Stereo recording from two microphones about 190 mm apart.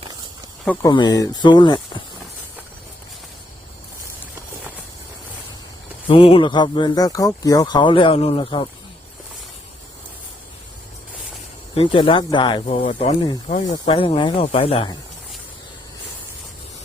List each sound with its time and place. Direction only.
0.6 s speech: 10° left (ahead or behind)
0.9 s speech: 20° left (ahead or behind)
6.1 s speech: 30° left (ahead or behind)
11.7 s speech: 30° left (ahead or behind)
12.6 s speech: 35° left (ahead or behind)